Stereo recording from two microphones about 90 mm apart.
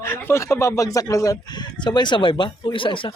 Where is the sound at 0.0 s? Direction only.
30° left (ahead or behind); by 3.2 s 70° left (ahead or behind).